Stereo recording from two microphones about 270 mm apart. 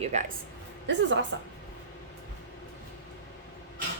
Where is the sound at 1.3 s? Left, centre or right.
Right.